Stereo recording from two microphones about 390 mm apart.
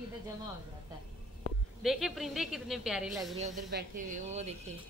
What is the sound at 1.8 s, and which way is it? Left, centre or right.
A woman's voice, centre.